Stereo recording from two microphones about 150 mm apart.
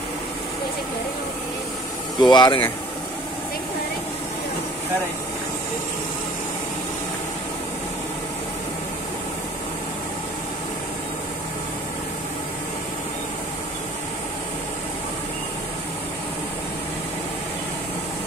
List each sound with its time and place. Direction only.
2.1 s speech: 30° left (ahead or behind)